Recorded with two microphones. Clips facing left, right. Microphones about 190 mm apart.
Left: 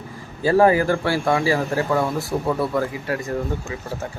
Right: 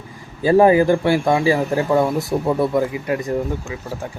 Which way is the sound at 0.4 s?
20° right (ahead or behind).